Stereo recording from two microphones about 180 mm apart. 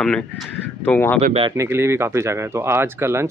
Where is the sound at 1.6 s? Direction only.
15° right (ahead or behind).